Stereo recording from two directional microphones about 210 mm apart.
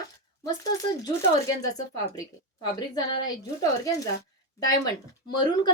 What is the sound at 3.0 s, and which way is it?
A woman's voice, 20° left (ahead or behind).